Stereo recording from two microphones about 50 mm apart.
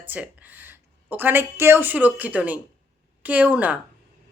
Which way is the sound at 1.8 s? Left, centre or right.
Right.